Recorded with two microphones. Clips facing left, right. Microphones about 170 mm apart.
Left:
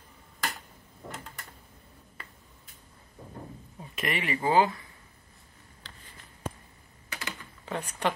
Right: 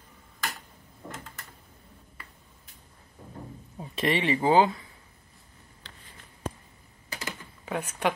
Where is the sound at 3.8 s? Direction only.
30° right (ahead or behind).